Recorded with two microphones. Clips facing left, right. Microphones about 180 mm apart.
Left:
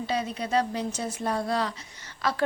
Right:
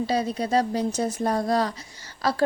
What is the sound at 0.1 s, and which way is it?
Speech, 35° right (ahead or behind).